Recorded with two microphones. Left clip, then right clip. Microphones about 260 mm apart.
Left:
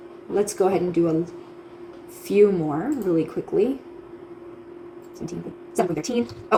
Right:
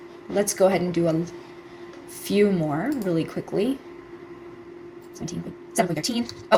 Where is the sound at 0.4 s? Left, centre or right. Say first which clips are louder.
Right 3 dB; right.